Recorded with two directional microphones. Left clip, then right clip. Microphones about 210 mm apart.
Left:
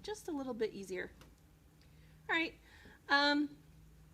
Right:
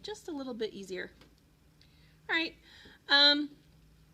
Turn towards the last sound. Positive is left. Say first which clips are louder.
# right 7 dB
turn(degrees=-20)  # may be behind; listen again after turning